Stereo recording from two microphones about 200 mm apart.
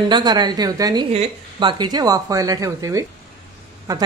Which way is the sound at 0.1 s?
20° right (ahead or behind).